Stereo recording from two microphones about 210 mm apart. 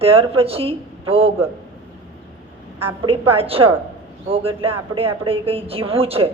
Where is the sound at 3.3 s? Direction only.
25° right (ahead or behind).